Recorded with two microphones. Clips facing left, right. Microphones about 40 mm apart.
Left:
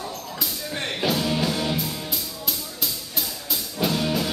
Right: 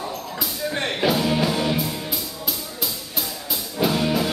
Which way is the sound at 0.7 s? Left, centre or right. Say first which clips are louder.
Right 4 dB; centre.